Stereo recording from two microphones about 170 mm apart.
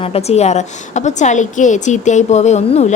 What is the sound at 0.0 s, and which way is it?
A woman's voice, 35° left (ahead or behind).